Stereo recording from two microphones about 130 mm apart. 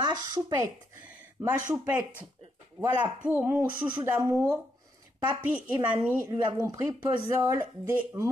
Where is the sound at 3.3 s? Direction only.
20° right (ahead or behind).